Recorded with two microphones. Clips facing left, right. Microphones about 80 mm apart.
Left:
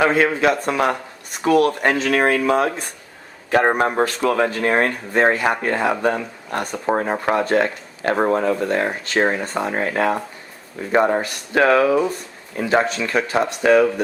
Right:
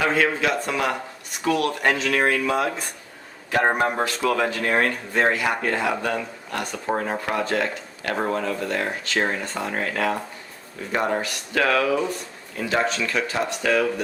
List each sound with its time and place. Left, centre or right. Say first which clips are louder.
0.0 s speech: left 5 dB; left